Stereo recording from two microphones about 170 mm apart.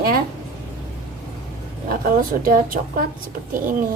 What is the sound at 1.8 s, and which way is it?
Speech, 55° right (ahead or behind).